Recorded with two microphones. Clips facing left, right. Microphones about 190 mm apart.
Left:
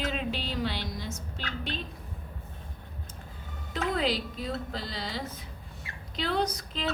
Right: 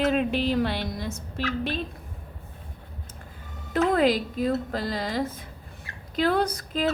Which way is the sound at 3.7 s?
50° right (ahead or behind).